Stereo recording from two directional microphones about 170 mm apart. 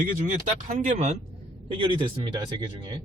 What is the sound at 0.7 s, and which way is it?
Speech, 45° right (ahead or behind).